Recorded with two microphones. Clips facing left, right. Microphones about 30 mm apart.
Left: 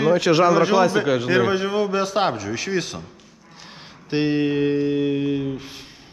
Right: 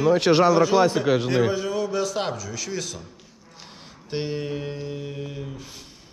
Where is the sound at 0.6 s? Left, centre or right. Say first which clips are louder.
Left 2 dB; left.